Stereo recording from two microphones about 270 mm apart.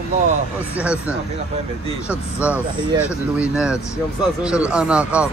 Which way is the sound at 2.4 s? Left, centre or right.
Centre.